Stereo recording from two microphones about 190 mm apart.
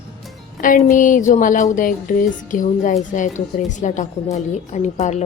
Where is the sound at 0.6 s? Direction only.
45° left (ahead or behind).